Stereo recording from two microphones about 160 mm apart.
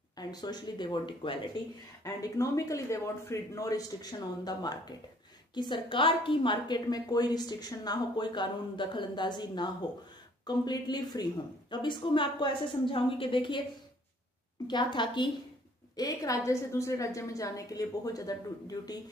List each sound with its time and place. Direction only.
0.1 s a woman's voice: 25° left (ahead or behind)
2.0 s a woman's voice: 20° left (ahead or behind)
14.7 s a woman's voice: 30° left (ahead or behind)